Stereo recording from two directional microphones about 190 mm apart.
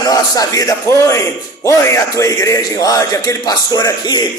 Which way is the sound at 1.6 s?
15° left (ahead or behind).